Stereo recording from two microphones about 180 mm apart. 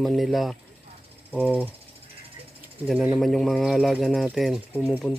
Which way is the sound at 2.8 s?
Centre (ahead or behind).